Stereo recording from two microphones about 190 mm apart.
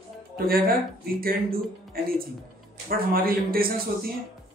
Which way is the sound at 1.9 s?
50° right (ahead or behind).